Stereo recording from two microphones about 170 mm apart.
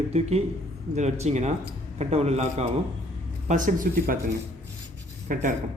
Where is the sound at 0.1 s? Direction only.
40° right (ahead or behind); by 4.2 s 55° right (ahead or behind).